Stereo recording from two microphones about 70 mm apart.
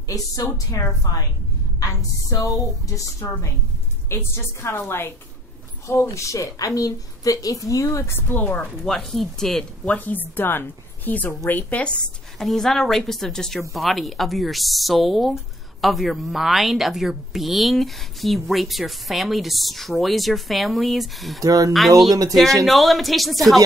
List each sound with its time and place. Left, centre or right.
0.1 s a woman's voice: left
5.9 s a woman's voice: left
8.1 s a woman's voice: left
8.8 s a woman's voice: centre
9.8 s a woman's voice: left
11.8 s a woman's voice: centre
21.4 s speech: right
22.7 s a woman's voice: centre